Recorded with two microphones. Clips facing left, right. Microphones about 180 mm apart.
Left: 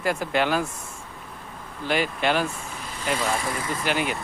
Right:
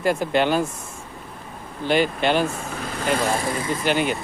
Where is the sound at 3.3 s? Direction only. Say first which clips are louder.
Right 4 dB; 30° right (ahead or behind).